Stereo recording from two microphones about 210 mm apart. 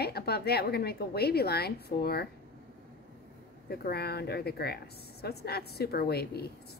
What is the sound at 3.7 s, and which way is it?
A woman's voice, 50° left (ahead or behind).